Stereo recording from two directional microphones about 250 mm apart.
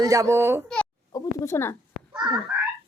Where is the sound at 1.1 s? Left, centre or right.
Centre.